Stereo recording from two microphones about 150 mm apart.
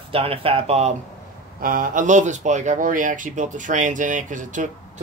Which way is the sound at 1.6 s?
70° right (ahead or behind).